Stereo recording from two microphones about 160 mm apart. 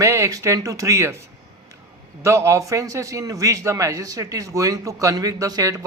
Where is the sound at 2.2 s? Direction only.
15° right (ahead or behind).